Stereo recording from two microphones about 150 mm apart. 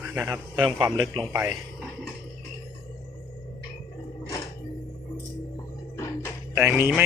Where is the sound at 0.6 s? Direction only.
30° right (ahead or behind).